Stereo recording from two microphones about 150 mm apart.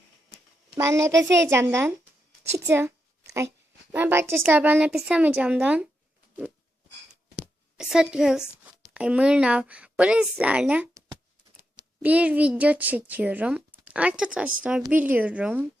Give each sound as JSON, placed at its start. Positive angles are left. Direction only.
{"t": 0.8, "sound": "a woman's voice", "side_deg": -20}
{"t": 2.6, "sound": "a sound", "side_deg": -15}
{"t": 3.9, "sound": "a child's voice", "side_deg": -15}
{"t": 7.3, "sound": "a sound", "side_deg": -5}
{"t": 8.9, "sound": "a child's voice", "side_deg": -5}
{"t": 12.0, "sound": "a child's voice", "side_deg": -10}